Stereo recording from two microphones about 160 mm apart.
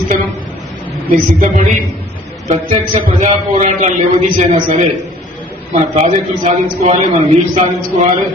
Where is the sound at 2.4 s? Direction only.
35° right (ahead or behind).